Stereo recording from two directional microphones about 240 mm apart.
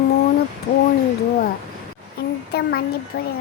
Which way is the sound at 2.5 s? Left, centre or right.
Left.